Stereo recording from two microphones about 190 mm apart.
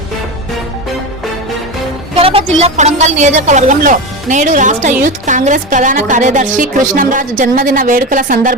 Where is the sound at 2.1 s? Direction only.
30° right (ahead or behind).